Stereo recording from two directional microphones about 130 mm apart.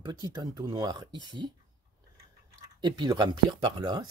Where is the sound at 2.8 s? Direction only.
35° right (ahead or behind).